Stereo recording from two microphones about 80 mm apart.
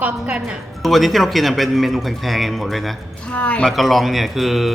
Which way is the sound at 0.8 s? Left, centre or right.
Centre.